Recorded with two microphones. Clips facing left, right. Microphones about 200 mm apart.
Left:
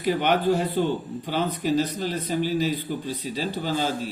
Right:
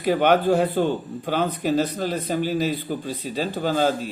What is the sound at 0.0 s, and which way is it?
Speech, 50° right (ahead or behind).